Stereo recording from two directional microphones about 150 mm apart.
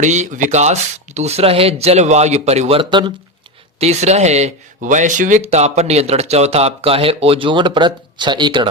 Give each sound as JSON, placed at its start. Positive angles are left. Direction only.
{"t": 0.0, "sound": "speech", "side_deg": -50}
{"t": 3.8, "sound": "speech", "side_deg": -45}
{"t": 5.4, "sound": "speech", "side_deg": -45}